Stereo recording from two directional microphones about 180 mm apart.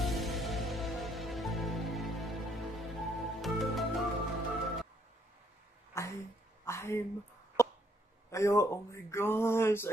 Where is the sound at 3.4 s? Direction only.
Centre (ahead or behind).